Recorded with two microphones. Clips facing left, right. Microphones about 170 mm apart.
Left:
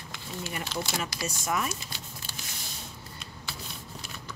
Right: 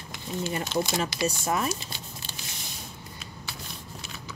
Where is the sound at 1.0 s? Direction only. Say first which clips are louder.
Right 6 dB; 25° right (ahead or behind).